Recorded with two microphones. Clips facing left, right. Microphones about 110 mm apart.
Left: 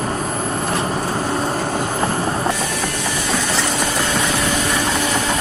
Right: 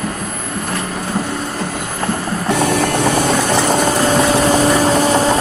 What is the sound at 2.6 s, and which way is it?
Vehicle, 60° right (ahead or behind).